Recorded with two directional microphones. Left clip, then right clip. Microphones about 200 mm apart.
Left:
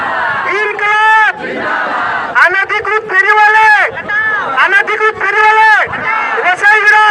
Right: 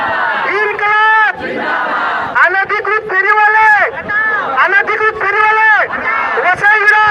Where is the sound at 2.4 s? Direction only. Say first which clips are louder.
Left 2 dB; 20° left (ahead or behind).